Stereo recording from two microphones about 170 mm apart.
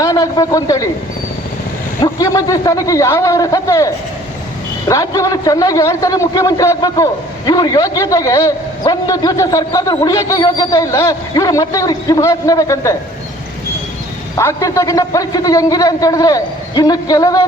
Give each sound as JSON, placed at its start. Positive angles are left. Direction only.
{"t": 0.0, "sound": "a man's voice", "side_deg": 20}
{"t": 2.0, "sound": "a man's voice", "side_deg": 20}
{"t": 14.3, "sound": "a man's voice", "side_deg": 20}